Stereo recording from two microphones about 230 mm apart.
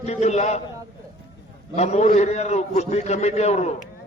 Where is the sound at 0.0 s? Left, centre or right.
Left.